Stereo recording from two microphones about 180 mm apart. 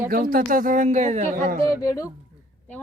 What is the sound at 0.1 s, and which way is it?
Speech, 55° right (ahead or behind).